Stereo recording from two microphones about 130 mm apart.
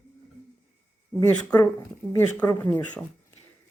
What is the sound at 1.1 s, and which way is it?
Speech, 15° left (ahead or behind).